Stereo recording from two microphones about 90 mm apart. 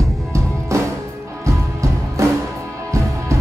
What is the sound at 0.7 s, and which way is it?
Music, 35° right (ahead or behind).